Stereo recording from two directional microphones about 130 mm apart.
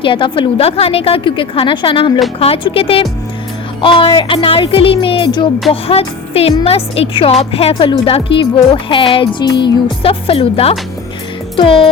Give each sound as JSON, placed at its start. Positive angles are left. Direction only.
{"t": 0.0, "sound": "a woman's voice", "side_deg": 40}